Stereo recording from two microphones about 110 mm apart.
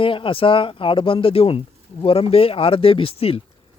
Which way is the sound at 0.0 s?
55° left (ahead or behind).